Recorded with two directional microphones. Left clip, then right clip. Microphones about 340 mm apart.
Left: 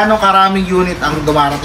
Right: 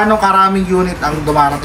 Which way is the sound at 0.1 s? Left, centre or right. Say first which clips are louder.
Left 1 dB; centre.